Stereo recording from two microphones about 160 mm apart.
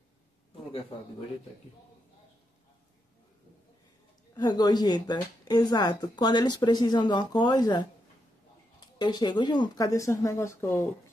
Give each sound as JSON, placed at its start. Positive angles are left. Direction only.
{"t": 4.4, "sound": "speech", "side_deg": 25}